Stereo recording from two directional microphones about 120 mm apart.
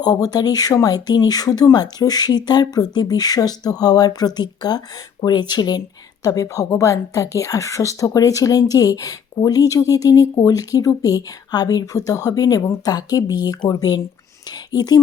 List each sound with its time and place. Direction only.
0.0 s a woman's voice: 35° left (ahead or behind)